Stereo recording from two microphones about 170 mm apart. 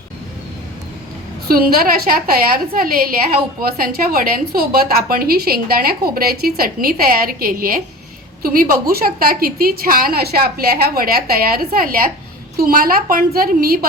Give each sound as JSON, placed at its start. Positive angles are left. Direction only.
{"t": 1.5, "sound": "a woman's voice", "side_deg": -60}